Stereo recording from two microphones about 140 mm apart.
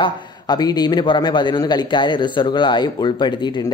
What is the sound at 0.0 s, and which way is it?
A man's voice, 30° left (ahead or behind).